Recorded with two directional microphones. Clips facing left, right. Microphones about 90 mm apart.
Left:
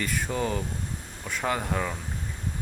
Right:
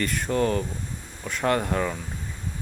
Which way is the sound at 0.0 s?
5° left (ahead or behind).